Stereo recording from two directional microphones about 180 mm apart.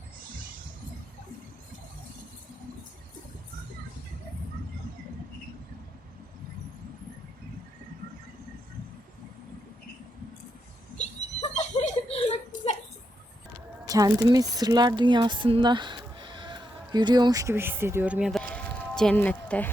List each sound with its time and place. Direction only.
10.9 s chuckle: 40° left (ahead or behind)
13.8 s a woman's voice: 20° right (ahead or behind); by 19.7 s 10° left (ahead or behind)